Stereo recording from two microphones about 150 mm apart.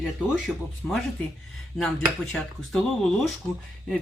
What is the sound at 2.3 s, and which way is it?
Speech, centre (ahead or behind).